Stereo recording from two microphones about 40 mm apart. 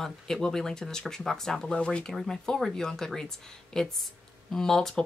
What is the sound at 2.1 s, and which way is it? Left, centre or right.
Speech, centre.